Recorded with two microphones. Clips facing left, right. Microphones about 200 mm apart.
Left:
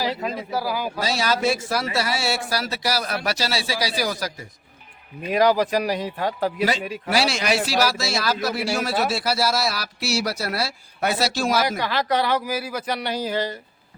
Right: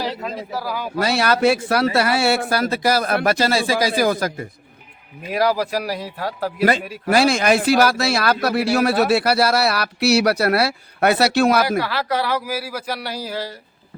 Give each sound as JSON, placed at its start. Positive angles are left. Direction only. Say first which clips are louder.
{"t": 0.0, "sound": "speech", "louder": "even", "side_deg": 5}
{"t": 0.9, "sound": "a man's voice", "louder": "right 8 dB", "side_deg": -60}
{"t": 5.3, "sound": "speech", "louder": "left 1 dB", "side_deg": -5}
{"t": 7.1, "sound": "a man's voice", "louder": "right 6 dB", "side_deg": -50}
{"t": 11.8, "sound": "speech", "louder": "right 1 dB", "side_deg": -5}